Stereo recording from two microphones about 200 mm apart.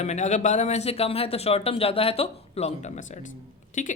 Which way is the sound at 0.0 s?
35° left (ahead or behind).